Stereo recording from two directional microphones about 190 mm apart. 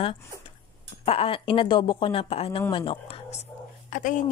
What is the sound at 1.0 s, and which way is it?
Speech, 30° left (ahead or behind).